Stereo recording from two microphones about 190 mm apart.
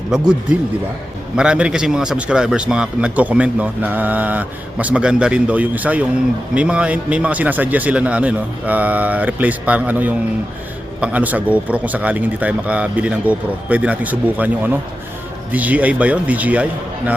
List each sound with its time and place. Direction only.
1.4 s a man's voice: 5° right (ahead or behind)